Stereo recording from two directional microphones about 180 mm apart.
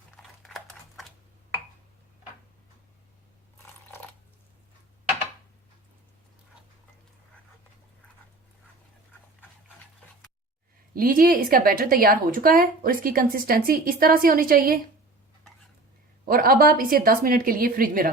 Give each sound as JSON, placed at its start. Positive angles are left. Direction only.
{"t": 0.2, "sound": "a sound", "side_deg": 0}
{"t": 10.9, "sound": "speech", "side_deg": -50}
{"t": 16.2, "sound": "speech", "side_deg": -55}